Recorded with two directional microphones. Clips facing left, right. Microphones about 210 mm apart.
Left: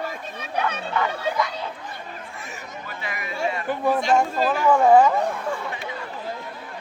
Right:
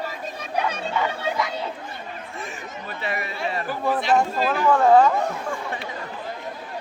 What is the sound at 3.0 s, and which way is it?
Speech, 30° right (ahead or behind).